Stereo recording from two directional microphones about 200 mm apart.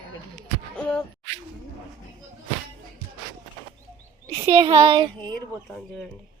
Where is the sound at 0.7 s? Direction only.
5° left (ahead or behind).